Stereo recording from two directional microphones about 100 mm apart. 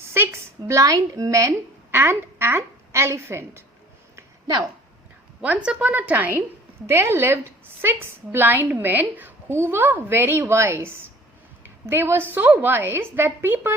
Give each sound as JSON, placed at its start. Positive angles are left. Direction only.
{"t": 0.0, "sound": "a woman's voice", "side_deg": -25}
{"t": 4.1, "sound": "a sound", "side_deg": -40}
{"t": 5.4, "sound": "a woman's voice", "side_deg": -15}